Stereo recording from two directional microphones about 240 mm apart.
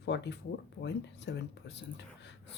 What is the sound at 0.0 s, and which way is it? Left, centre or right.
Speech, left.